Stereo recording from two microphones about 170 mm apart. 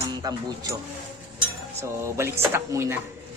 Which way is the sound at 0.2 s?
20° right (ahead or behind).